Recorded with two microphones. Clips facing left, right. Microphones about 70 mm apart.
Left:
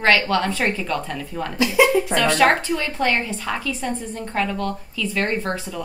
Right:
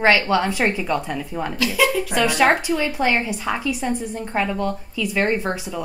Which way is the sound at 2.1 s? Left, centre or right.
Centre.